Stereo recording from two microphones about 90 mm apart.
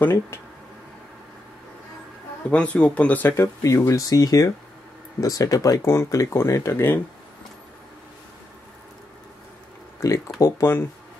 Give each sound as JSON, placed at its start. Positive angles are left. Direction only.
{"t": 2.5, "sound": "speech", "side_deg": 15}
{"t": 3.6, "sound": "speech", "side_deg": 35}
{"t": 5.8, "sound": "speech", "side_deg": 30}
{"t": 10.0, "sound": "speech", "side_deg": 40}
{"t": 10.6, "sound": "speech", "side_deg": 25}